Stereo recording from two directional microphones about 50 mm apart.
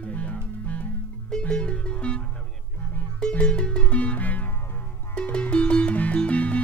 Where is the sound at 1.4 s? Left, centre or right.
Left.